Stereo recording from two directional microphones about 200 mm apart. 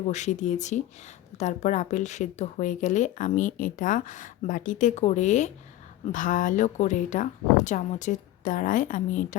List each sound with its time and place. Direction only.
0.1 s speech: 35° left (ahead or behind)